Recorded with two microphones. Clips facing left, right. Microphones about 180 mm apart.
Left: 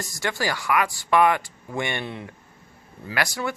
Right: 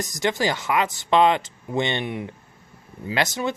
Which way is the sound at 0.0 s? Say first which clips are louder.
Right 4 dB; 20° right (ahead or behind).